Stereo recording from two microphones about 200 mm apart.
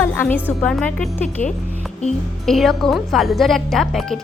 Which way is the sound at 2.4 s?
Centre (ahead or behind).